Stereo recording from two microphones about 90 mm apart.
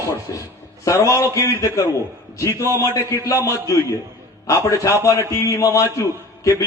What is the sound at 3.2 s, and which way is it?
A man's voice, 35° left (ahead or behind).